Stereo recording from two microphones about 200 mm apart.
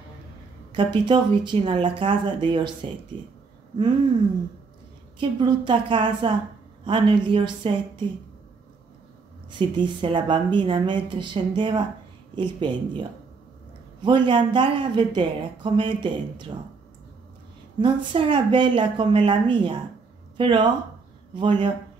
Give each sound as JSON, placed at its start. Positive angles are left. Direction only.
{"t": 0.7, "sound": "speech", "side_deg": -25}
{"t": 5.4, "sound": "speech", "side_deg": -25}
{"t": 9.5, "sound": "speech", "side_deg": -25}
{"t": 14.0, "sound": "speech", "side_deg": -25}
{"t": 17.7, "sound": "speech", "side_deg": -25}